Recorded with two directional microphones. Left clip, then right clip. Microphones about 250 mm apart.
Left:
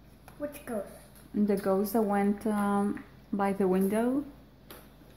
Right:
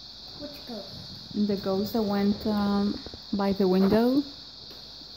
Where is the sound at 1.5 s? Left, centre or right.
Centre; by 4.1 s right.